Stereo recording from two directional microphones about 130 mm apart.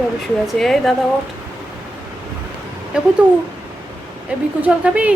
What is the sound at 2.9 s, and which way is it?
Speech, 10° right (ahead or behind).